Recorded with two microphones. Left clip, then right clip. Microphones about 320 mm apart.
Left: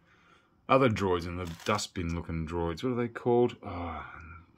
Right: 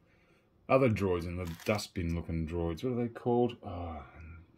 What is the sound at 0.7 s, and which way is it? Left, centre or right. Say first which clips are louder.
Speech: left 3 dB; centre.